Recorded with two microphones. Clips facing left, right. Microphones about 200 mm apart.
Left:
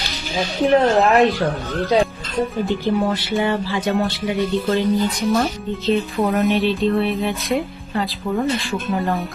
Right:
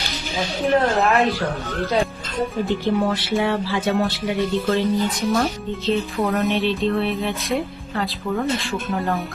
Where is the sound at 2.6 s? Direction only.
Centre (ahead or behind).